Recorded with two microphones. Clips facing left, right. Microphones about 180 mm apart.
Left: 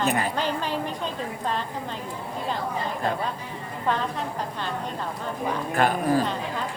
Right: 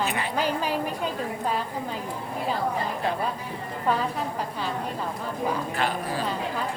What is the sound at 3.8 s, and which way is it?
Speech, 5° right (ahead or behind).